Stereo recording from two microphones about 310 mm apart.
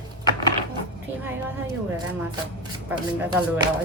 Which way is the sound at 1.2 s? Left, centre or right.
Centre.